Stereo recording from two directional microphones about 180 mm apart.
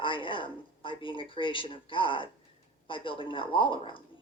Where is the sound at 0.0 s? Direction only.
30° left (ahead or behind).